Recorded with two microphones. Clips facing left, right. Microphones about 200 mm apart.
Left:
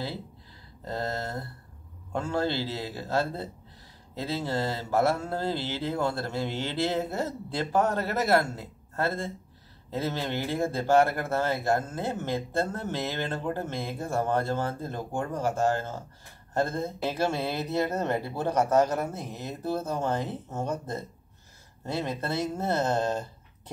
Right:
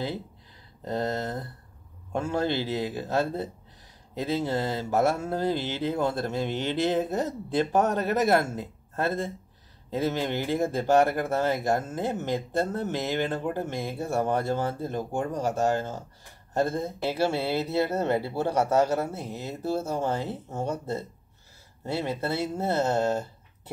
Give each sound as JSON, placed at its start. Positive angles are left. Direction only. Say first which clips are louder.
{"t": 0.8, "sound": "speech", "louder": "right 3 dB", "side_deg": -20}